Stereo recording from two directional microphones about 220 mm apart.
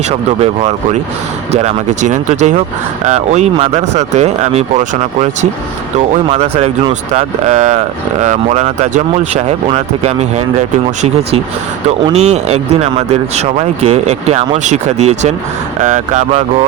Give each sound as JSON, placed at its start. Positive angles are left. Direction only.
{"t": 0.1, "sound": "speech", "side_deg": -30}
{"t": 11.9, "sound": "speech", "side_deg": -30}